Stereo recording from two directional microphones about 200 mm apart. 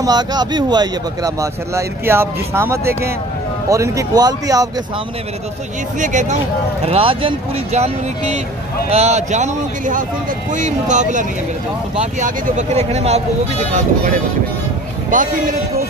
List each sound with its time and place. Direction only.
0.0 s speech: 20° right (ahead or behind)
5.9 s speech: 40° right (ahead or behind)
6.9 s speech: 25° right (ahead or behind)
15.0 s speech: 40° right (ahead or behind)